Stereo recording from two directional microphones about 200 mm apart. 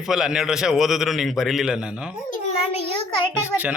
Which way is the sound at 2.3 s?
30° left (ahead or behind).